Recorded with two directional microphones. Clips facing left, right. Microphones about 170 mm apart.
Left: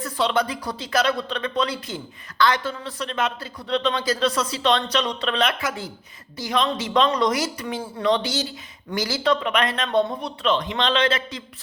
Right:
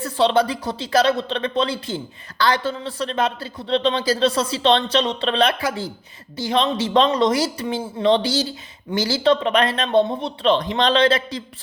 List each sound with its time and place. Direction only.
0.0 s speech: 30° right (ahead or behind)